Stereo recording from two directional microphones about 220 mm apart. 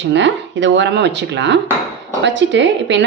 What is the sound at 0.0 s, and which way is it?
A woman's voice, 55° right (ahead or behind).